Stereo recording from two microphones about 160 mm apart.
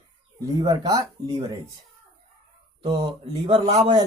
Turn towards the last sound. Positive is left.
turn(degrees=-35)  # may be behind; listen again after turning